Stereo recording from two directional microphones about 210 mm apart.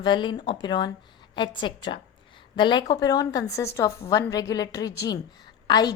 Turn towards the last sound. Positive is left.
turn(degrees=20)  # may be behind; listen again after turning